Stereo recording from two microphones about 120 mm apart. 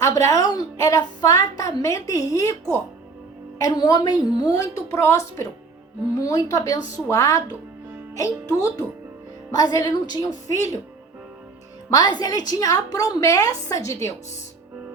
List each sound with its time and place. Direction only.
0.0 s a woman's voice: 30° left (ahead or behind)
11.9 s a woman's voice: 35° left (ahead or behind)